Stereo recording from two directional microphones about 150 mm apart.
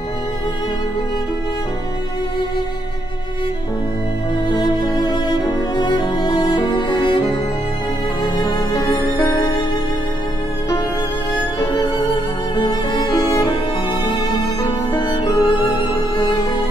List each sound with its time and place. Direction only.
4.5 s music: 30° left (ahead or behind)
12.5 s music: 30° left (ahead or behind)